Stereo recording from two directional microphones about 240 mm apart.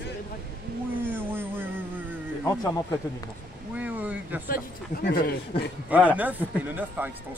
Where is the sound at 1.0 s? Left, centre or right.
Centre.